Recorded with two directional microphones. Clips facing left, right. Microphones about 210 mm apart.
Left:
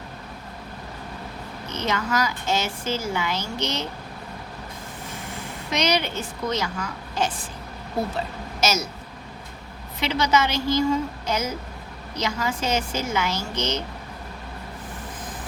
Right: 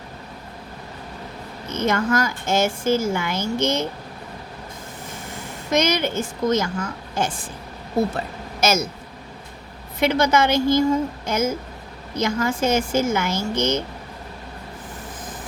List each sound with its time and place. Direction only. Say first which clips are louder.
1.7 s a woman's voice: right 5 dB; 50° right (ahead or behind)
5.7 s a woman's voice: right 4 dB; 50° right (ahead or behind)
8.6 s a woman's voice: right 4 dB; 50° right (ahead or behind)
10.0 s a woman's voice: right 4 dB; 50° right (ahead or behind)